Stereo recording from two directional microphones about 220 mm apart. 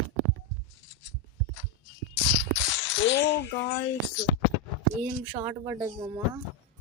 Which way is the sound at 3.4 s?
55° left (ahead or behind).